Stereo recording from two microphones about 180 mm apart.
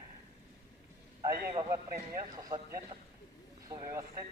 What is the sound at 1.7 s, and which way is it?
Speech, 20° right (ahead or behind).